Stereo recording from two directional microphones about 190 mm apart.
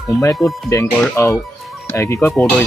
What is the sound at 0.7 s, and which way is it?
Speech, 15° left (ahead or behind).